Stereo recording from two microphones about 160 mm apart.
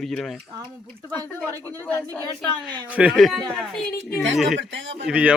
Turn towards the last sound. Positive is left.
turn(degrees=-5)  # may be behind; listen again after turning